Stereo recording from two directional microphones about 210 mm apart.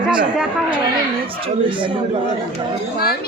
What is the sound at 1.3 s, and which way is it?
Speech, 25° right (ahead or behind).